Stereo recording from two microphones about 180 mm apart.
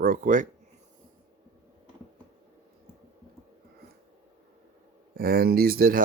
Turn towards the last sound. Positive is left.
turn(degrees=-55)  # may be behind; listen again after turning